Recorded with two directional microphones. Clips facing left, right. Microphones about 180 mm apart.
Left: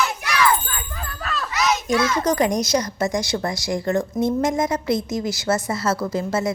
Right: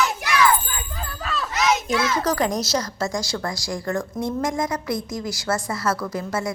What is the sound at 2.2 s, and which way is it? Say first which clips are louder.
A child's voice: left 3 dB; 15° left (ahead or behind).